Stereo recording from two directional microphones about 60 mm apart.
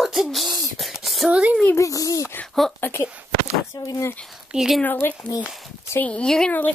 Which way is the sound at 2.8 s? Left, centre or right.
Left.